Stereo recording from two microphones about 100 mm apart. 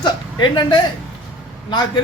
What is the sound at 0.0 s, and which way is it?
Speech, 50° left (ahead or behind).